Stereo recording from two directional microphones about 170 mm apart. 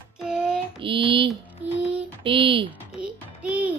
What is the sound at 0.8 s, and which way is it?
Speech, 30° right (ahead or behind).